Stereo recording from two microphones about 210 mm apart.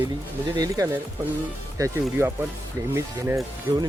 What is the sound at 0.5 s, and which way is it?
Speech, 15° right (ahead or behind).